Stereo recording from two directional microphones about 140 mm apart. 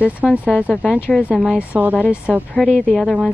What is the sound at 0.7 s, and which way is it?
Speech, 5° left (ahead or behind).